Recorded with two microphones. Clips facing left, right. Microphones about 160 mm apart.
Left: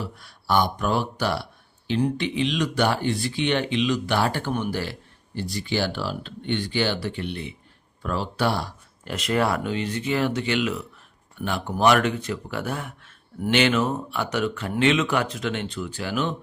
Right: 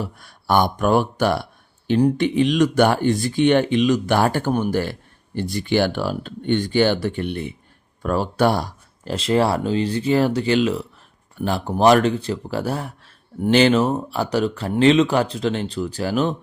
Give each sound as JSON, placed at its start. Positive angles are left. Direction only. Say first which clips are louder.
{"t": 0.0, "sound": "speech", "louder": "right 4 dB", "side_deg": -50}
{"t": 2.0, "sound": "speech", "louder": "right 7 dB", "side_deg": -40}